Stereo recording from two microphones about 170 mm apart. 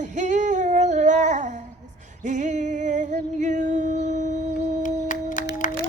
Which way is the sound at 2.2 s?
45° right (ahead or behind).